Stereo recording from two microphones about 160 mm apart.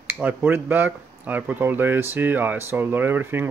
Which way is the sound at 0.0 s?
10° right (ahead or behind).